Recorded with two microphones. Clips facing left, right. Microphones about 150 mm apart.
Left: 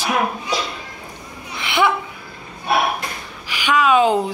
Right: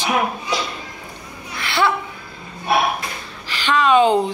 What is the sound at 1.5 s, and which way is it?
Laughter, 20° left (ahead or behind).